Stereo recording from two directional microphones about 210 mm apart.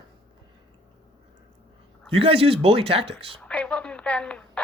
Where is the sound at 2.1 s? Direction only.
25° right (ahead or behind).